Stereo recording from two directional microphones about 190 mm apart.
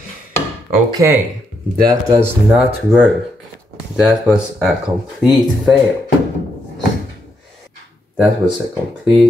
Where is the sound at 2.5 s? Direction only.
5° right (ahead or behind).